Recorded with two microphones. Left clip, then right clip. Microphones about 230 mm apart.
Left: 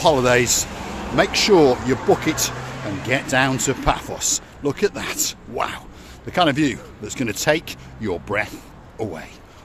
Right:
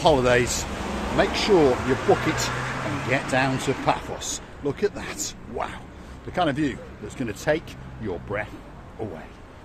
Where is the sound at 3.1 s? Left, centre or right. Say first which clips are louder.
Left 5 dB; left.